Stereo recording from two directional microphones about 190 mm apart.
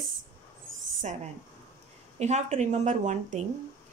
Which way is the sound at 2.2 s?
35° right (ahead or behind).